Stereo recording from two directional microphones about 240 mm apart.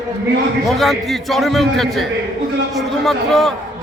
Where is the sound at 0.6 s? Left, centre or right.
Centre.